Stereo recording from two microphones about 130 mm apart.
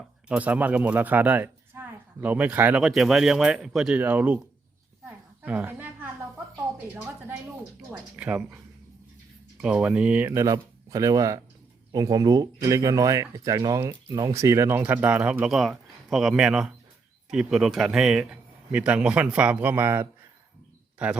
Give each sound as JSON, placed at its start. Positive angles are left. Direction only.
{"t": 0.3, "sound": "speech", "side_deg": -10}
{"t": 2.8, "sound": "speech", "side_deg": 0}
{"t": 3.9, "sound": "speech", "side_deg": -10}
{"t": 5.0, "sound": "a sound", "side_deg": -10}
{"t": 8.1, "sound": "speech", "side_deg": -10}
{"t": 14.8, "sound": "speech", "side_deg": -15}